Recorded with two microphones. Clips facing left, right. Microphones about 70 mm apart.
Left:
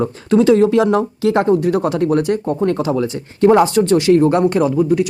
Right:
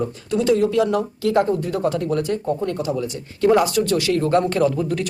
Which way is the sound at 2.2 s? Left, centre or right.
Left.